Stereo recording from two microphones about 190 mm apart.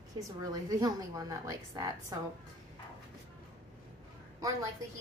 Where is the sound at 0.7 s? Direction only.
20° right (ahead or behind).